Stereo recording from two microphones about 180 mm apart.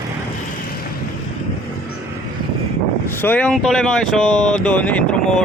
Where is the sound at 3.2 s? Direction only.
10° left (ahead or behind).